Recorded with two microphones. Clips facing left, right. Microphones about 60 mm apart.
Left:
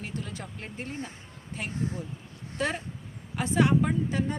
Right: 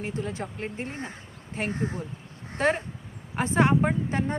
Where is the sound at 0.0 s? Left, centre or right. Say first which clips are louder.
Right 6 dB; right.